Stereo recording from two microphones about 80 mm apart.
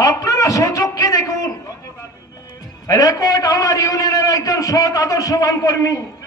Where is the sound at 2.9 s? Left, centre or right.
Left.